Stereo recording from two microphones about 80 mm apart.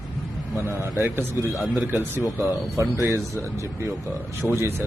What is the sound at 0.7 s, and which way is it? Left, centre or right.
A man's voice, right.